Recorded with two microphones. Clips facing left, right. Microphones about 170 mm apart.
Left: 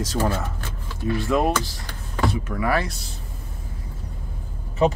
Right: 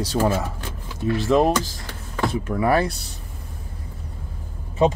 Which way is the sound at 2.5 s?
30° right (ahead or behind).